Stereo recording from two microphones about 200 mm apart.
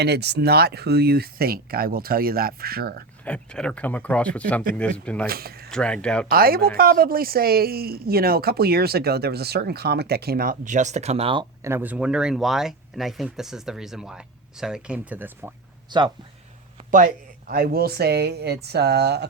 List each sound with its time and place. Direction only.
0.0 s speech: 55° right (ahead or behind)
3.2 s speech: 5° left (ahead or behind)
5.2 s speech: 50° right (ahead or behind)
5.7 s speech: 5° left (ahead or behind)
6.2 s speech: 50° right (ahead or behind); by 11.4 s 25° right (ahead or behind)
11.6 s speech: 10° right (ahead or behind)
15.9 s speech: 25° right (ahead or behind)
16.9 s speech: 40° right (ahead or behind)